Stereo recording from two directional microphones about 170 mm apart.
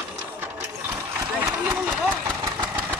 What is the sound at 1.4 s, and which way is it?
Run, 15° right (ahead or behind).